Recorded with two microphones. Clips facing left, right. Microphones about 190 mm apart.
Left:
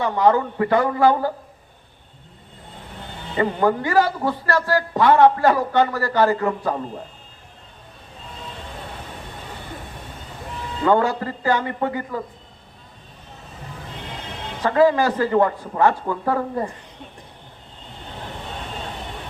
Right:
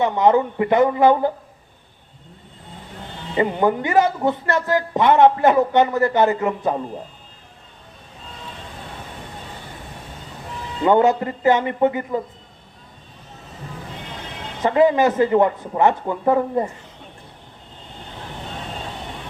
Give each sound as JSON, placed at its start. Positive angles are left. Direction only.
{"t": 0.0, "sound": "speech", "side_deg": -20}
{"t": 3.3, "sound": "speech", "side_deg": -20}
{"t": 10.8, "sound": "speech", "side_deg": -20}
{"t": 14.6, "sound": "speech", "side_deg": -20}